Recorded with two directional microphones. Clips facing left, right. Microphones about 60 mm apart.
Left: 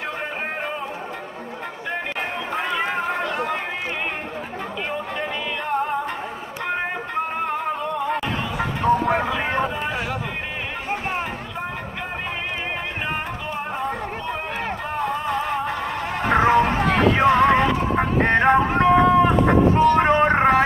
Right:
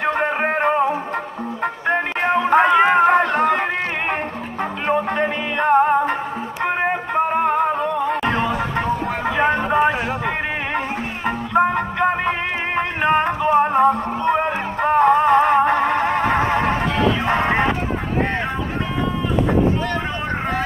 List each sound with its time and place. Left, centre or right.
0.0 s music: right
4.8 s music: right
6.6 s music: right
8.2 s chatter: right
9.7 s a sound: right
11.5 s music: right
17.9 s a sound: left
20.0 s vehicle: left